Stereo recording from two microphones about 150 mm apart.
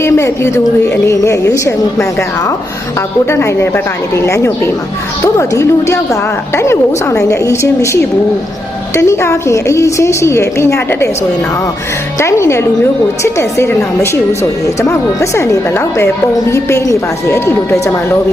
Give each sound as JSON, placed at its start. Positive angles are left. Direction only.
{"t": 0.0, "sound": "a woman's voice", "side_deg": 20}
{"t": 3.2, "sound": "a woman's voice", "side_deg": 15}
{"t": 9.0, "sound": "a woman's voice", "side_deg": 20}
{"t": 12.2, "sound": "a woman's voice", "side_deg": 20}